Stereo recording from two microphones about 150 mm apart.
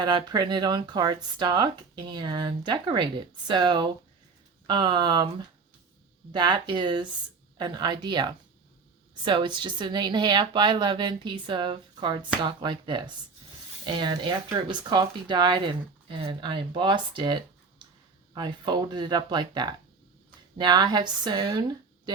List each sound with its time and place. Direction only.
0.0 s speech: 30° right (ahead or behind)
6.3 s speech: 30° right (ahead or behind)